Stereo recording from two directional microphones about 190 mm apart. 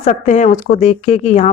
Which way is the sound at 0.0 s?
40° left (ahead or behind).